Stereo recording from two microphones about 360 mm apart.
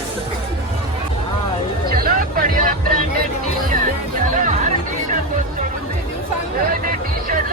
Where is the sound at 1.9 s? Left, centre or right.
Right.